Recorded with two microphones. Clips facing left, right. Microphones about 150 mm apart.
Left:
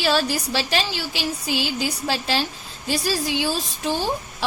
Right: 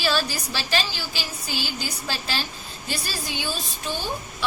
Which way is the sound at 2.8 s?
90° left.